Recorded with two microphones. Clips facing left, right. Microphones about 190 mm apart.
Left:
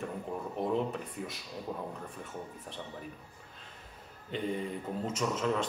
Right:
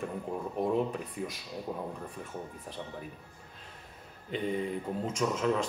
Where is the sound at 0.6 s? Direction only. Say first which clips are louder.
Right 2 dB; 5° right (ahead or behind).